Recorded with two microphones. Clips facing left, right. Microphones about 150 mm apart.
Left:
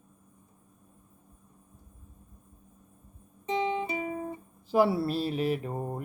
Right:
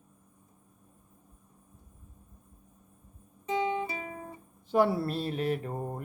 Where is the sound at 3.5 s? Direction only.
20° left (ahead or behind).